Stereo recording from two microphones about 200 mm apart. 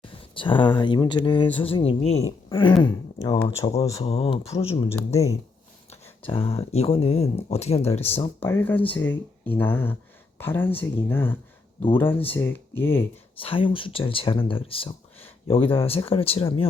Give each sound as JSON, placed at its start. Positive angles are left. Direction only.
{"t": 0.0, "sound": "speech", "side_deg": 25}
{"t": 4.9, "sound": "speech", "side_deg": 15}
{"t": 5.9, "sound": "speech", "side_deg": 30}
{"t": 8.4, "sound": "speech", "side_deg": 10}
{"t": 13.4, "sound": "speech", "side_deg": 25}